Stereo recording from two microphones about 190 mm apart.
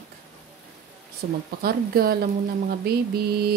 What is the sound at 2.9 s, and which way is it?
Mantra, 55° right (ahead or behind).